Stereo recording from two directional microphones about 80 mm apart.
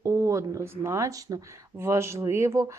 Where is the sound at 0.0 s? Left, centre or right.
Right.